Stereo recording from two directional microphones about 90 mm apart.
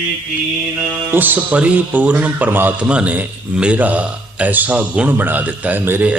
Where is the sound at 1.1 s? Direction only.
20° right (ahead or behind).